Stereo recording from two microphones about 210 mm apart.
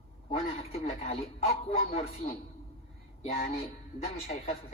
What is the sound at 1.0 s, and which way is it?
A man's voice, 30° left (ahead or behind).